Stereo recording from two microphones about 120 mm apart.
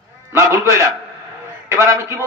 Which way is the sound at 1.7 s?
25° right (ahead or behind).